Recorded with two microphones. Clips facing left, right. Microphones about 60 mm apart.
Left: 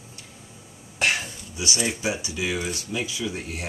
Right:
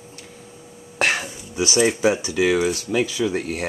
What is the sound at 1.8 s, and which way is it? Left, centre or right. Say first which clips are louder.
Speech: right 8 dB; right.